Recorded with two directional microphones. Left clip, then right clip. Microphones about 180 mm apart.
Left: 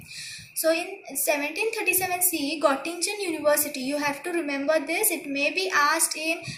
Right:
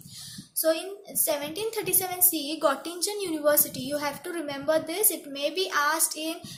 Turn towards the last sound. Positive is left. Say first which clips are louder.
# left 5 dB
turn(degrees=-60)  # may be behind; listen again after turning